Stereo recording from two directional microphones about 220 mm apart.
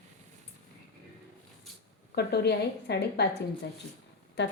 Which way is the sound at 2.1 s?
50° left (ahead or behind).